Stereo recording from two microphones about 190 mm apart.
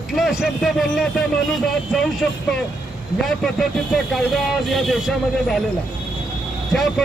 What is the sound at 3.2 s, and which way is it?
Speech, centre (ahead or behind).